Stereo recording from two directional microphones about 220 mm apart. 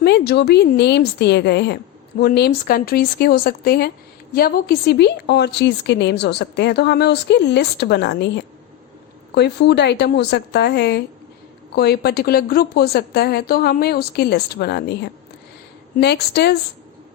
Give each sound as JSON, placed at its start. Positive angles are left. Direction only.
{"t": 0.0, "sound": "a woman's voice", "side_deg": 50}
{"t": 9.3, "sound": "a woman's voice", "side_deg": 50}
{"t": 16.0, "sound": "a woman's voice", "side_deg": 50}